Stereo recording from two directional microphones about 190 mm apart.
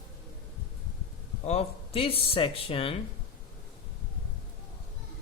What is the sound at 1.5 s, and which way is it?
Speech, 30° left (ahead or behind).